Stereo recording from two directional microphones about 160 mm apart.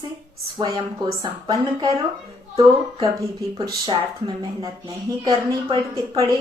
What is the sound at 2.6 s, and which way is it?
A woman's voice, 20° right (ahead or behind).